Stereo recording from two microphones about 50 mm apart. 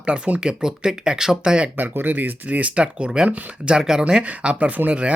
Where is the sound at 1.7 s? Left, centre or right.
Right; by 4.0 s centre.